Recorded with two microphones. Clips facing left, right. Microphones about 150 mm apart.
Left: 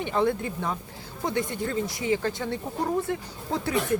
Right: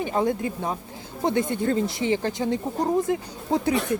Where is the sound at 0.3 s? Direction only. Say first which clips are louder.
Right 2 dB; 20° right (ahead or behind).